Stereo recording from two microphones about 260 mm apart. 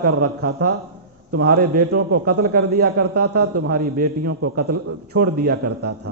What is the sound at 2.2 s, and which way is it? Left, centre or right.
A man's voice, right.